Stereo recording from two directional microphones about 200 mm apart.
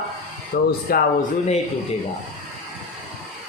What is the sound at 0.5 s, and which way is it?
Speech, 50° left (ahead or behind).